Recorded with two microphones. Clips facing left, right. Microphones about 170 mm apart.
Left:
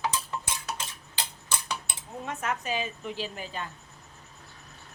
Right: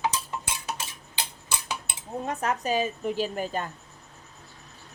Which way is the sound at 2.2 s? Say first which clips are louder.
Right 4 dB; 35° right (ahead or behind).